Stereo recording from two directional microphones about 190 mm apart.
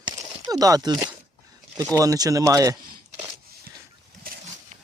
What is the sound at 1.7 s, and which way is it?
Speech, 15° right (ahead or behind).